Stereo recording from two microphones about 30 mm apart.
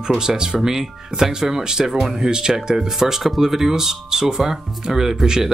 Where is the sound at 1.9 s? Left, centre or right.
Centre.